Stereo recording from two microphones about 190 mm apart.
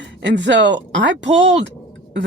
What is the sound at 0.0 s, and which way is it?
Speech, 65° right (ahead or behind).